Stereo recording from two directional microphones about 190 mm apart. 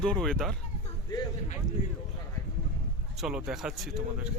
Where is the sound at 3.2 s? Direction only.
Centre (ahead or behind).